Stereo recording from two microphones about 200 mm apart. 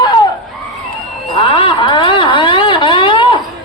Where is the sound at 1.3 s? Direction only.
25° left (ahead or behind).